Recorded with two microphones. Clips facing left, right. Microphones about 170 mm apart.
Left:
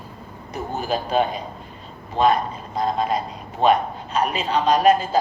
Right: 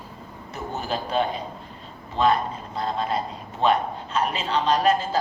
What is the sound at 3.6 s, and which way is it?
A man's voice, 15° left (ahead or behind).